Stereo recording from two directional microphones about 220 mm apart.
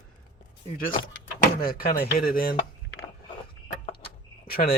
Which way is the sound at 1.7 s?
45° left (ahead or behind).